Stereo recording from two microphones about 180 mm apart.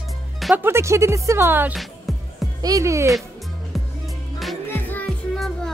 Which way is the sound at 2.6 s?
20° right (ahead or behind).